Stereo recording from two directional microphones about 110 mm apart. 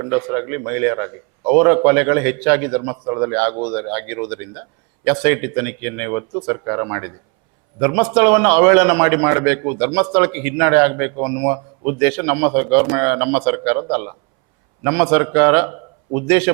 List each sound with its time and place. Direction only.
0.0 s a man's voice: 15° right (ahead or behind)
2.8 s a man's voice: 25° right (ahead or behind)